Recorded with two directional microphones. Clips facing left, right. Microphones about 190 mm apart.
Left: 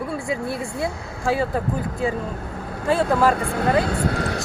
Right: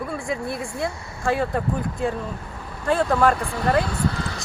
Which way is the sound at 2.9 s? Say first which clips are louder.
Left 1 dB; 5° left (ahead or behind).